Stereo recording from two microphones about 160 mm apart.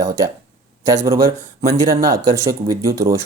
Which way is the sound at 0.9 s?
20° right (ahead or behind).